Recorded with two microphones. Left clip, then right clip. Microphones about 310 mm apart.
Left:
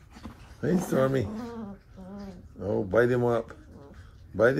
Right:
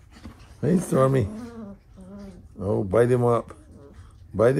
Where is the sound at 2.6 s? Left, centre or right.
Right.